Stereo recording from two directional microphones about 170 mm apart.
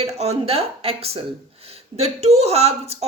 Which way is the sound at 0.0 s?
40° right (ahead or behind).